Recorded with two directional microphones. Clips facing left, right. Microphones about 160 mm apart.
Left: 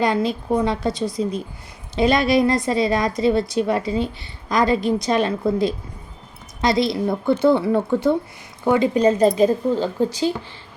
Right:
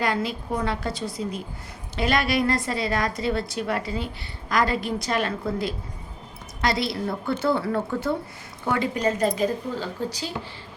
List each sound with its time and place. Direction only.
0.0 s a woman's voice: 20° left (ahead or behind)